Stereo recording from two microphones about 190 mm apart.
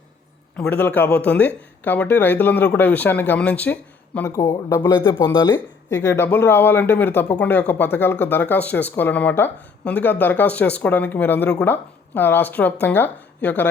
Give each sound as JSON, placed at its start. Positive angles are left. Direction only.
{"t": 0.5, "sound": "speech", "side_deg": 10}
{"t": 5.1, "sound": "speech", "side_deg": 25}
{"t": 5.9, "sound": "speech", "side_deg": 15}